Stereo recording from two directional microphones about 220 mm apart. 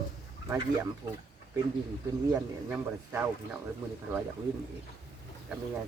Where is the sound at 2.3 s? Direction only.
10° right (ahead or behind).